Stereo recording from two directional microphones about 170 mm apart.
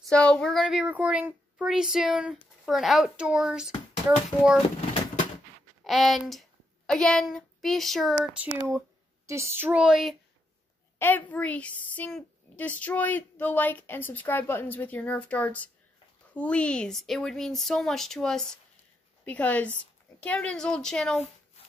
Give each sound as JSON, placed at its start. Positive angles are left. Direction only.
{"t": 0.0, "sound": "speech", "side_deg": 5}
{"t": 4.3, "sound": "speech", "side_deg": 25}
{"t": 5.9, "sound": "speech", "side_deg": 0}
{"t": 11.0, "sound": "a woman's voice", "side_deg": 10}